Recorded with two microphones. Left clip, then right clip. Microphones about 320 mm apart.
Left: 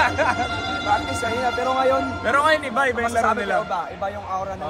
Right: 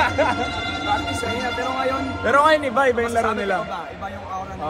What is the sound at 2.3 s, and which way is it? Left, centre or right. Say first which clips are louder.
Speech: right 3 dB; centre.